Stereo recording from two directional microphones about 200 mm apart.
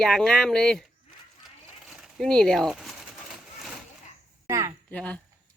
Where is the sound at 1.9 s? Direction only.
Centre (ahead or behind).